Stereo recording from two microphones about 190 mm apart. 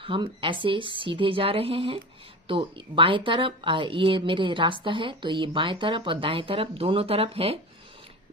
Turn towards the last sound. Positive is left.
turn(degrees=-30)  # may be behind; listen again after turning